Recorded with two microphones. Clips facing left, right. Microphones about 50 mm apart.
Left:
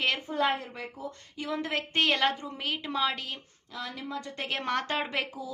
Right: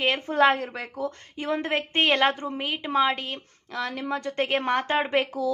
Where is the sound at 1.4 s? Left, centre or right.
Right.